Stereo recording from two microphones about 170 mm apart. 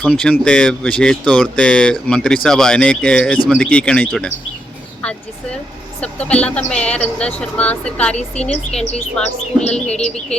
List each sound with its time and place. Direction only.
0.0 s speech: 5° left (ahead or behind)
6.0 s speech: 5° left (ahead or behind)
8.4 s speech: 40° left (ahead or behind)
8.9 s speech: 5° left (ahead or behind)